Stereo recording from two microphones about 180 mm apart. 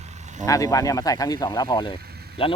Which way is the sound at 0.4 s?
20° left (ahead or behind).